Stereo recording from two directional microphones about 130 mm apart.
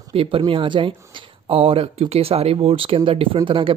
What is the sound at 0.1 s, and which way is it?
Speech, 45° right (ahead or behind).